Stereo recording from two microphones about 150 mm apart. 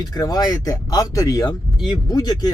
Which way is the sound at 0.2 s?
25° left (ahead or behind).